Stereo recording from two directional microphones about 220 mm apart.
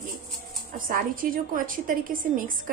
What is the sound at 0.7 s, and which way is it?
A woman's voice, 40° right (ahead or behind).